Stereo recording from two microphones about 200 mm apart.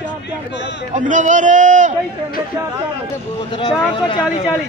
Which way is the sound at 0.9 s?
40° right (ahead or behind).